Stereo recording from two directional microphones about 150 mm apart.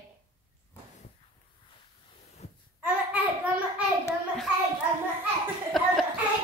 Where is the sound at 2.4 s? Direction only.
45° left (ahead or behind).